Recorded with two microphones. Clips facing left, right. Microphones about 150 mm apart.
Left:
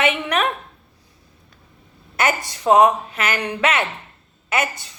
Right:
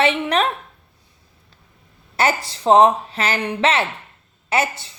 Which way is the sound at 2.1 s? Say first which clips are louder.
Right 1 dB; 30° right (ahead or behind).